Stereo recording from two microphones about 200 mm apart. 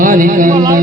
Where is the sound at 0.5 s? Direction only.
15° right (ahead or behind).